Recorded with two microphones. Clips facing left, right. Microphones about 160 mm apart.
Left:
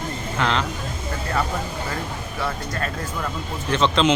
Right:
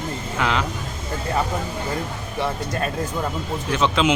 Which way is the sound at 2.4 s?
20° right (ahead or behind).